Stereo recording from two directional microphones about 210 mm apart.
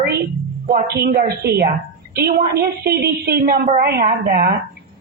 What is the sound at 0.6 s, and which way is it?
A woman's voice, 45° right (ahead or behind).